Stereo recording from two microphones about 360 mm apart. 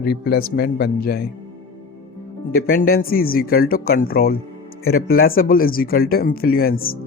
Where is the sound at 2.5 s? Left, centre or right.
Left.